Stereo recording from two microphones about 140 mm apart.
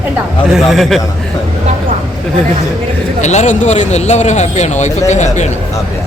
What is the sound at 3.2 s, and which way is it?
Speech, 55° left (ahead or behind).